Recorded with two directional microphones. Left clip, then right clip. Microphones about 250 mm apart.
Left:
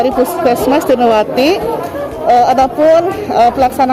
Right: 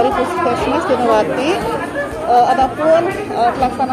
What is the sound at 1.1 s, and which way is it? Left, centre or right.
Speech, left.